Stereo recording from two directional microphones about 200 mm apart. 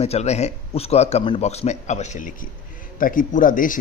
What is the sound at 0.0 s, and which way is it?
A man's voice, 30° left (ahead or behind).